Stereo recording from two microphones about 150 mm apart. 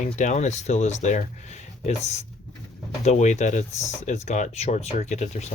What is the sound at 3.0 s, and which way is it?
Speech, 50° left (ahead or behind).